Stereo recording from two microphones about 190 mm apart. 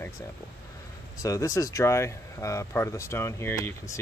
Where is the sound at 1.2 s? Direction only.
15° left (ahead or behind).